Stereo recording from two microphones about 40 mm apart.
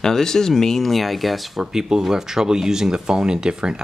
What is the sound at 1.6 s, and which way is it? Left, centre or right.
Speech, centre.